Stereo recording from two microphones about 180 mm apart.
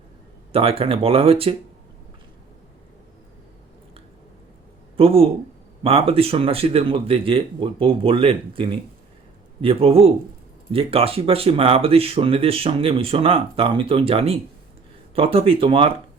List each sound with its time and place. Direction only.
0.5 s speech: 30° right (ahead or behind)
4.9 s speech: 30° right (ahead or behind)